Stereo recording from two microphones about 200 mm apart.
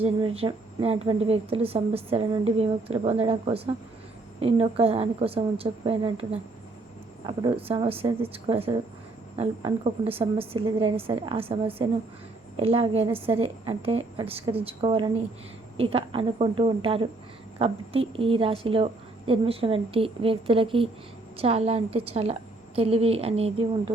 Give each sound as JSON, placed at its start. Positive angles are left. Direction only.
{"t": 0.0, "sound": "a woman's voice", "side_deg": -25}
{"t": 7.3, "sound": "a woman's voice", "side_deg": -25}